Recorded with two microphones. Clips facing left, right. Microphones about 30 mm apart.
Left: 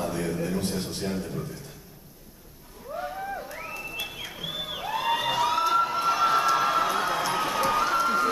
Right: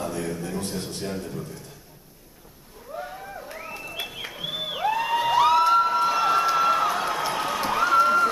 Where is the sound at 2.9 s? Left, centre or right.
Centre.